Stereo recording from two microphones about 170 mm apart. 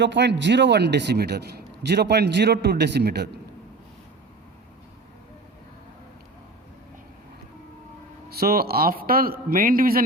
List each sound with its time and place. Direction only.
0.0 s a man's voice: 90° right; by 3.4 s 70° right (ahead or behind)
8.3 s a man's voice: 65° right (ahead or behind)